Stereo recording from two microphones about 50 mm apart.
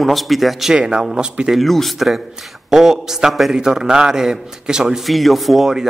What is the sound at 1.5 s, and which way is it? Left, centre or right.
Speech, centre.